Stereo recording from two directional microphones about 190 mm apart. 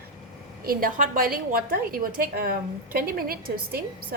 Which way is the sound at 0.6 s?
50° right (ahead or behind).